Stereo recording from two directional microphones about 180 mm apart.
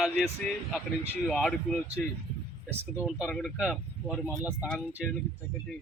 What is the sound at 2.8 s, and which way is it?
Speech, 10° right (ahead or behind).